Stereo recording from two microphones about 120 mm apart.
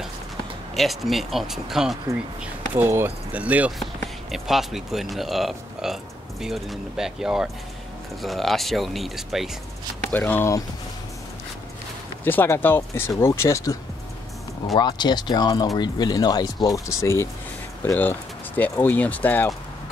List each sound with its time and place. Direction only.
0.7 s speech: centre (ahead or behind)
2.4 s speech: 15° right (ahead or behind)
3.8 s speech: centre (ahead or behind)
10.1 s speech: 15° left (ahead or behind)
12.3 s speech: 15° left (ahead or behind)
14.8 s speech: 40° left (ahead or behind)
18.6 s speech: 15° left (ahead or behind)